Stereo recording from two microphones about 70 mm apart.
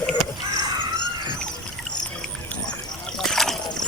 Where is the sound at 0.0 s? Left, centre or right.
Centre.